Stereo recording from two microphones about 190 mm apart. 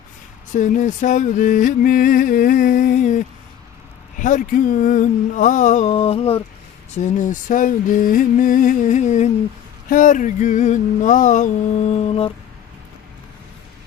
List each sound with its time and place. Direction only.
0.5 s music: 40° left (ahead or behind)
4.2 s speech: 45° left (ahead or behind)
6.9 s music: 40° left (ahead or behind)
9.9 s speech: 45° left (ahead or behind)
12.0 s a sound: 30° left (ahead or behind)